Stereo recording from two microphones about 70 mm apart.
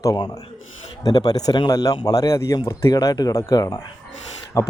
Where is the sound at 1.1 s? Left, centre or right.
Left.